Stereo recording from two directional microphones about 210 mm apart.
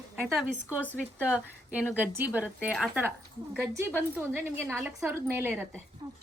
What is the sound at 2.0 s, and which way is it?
A woman's voice, 10° right (ahead or behind).